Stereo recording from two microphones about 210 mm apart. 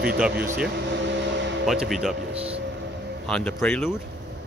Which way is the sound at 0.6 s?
55° right (ahead or behind).